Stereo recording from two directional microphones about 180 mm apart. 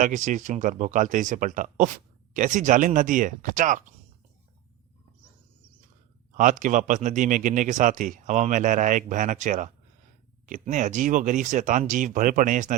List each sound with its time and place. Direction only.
0.0 s speech: 45° right (ahead or behind)
6.3 s speech: 45° right (ahead or behind)